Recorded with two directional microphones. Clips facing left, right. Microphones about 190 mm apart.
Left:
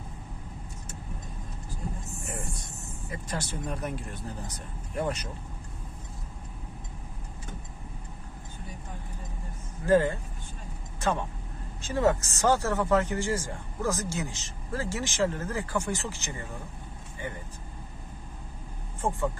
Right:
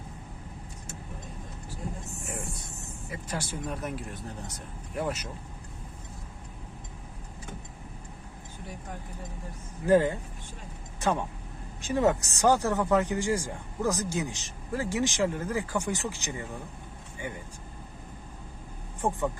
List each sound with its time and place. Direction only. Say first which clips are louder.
3.1 s speech: even; 10° right (ahead or behind)
9.8 s speech: right 1 dB; 15° right (ahead or behind)
19.0 s speech: right 1 dB; 15° right (ahead or behind)